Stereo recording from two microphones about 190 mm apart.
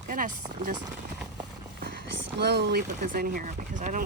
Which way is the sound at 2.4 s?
60° right (ahead or behind).